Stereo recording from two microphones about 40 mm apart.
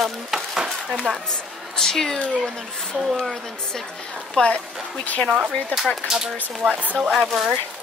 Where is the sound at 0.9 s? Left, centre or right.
Centre.